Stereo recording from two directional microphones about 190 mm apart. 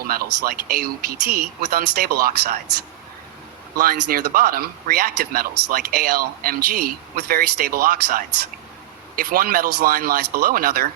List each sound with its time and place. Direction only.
0.1 s speech: 50° right (ahead or behind)
3.8 s speech: 50° right (ahead or behind)